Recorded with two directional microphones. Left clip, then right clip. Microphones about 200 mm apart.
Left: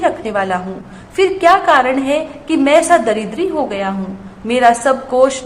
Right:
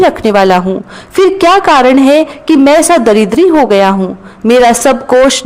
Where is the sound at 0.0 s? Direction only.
45° right (ahead or behind).